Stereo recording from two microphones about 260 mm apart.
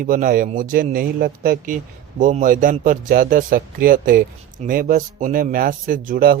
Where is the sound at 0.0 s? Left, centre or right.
Right.